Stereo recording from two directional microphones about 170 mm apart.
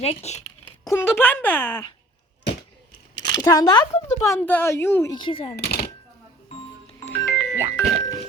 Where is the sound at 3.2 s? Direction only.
25° left (ahead or behind).